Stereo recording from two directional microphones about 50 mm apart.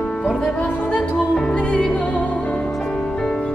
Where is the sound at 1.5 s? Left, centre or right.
Left.